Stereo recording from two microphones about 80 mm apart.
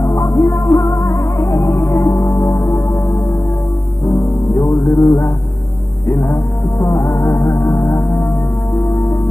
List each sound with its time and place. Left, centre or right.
0.2 s music: left
4.1 s music: left
7.1 s music: left